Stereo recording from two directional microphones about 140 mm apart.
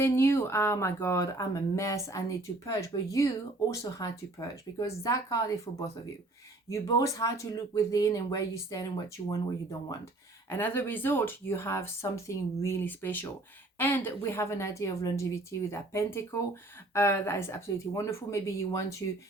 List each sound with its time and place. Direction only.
0.0 s a woman's voice: 15° left (ahead or behind)
10.5 s a woman's voice: 15° left (ahead or behind)